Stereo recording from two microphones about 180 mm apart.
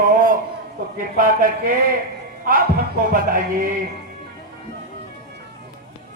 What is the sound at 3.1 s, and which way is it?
Speech, 50° right (ahead or behind).